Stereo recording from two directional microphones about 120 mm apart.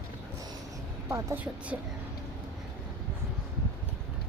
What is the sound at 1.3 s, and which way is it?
Speech, 10° right (ahead or behind).